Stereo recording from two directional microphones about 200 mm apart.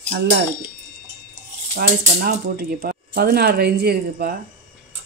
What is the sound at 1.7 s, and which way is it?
Speech, 50° right (ahead or behind).